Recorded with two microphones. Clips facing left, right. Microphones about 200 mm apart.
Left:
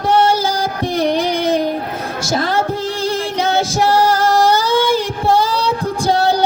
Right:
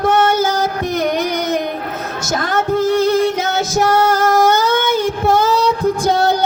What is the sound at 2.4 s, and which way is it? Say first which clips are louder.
Female singing: right 3 dB; 30° left (ahead or behind).